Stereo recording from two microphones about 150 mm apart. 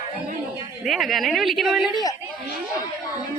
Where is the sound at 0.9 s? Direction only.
Centre (ahead or behind).